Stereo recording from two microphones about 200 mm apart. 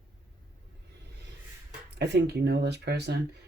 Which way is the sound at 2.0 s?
55° right (ahead or behind).